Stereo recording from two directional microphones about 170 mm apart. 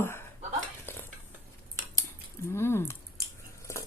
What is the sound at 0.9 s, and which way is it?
Stir, 15° left (ahead or behind).